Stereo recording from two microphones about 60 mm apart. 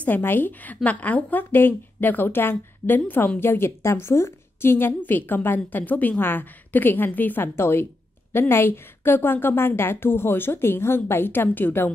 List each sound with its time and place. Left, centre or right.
0.0 s a woman's voice: left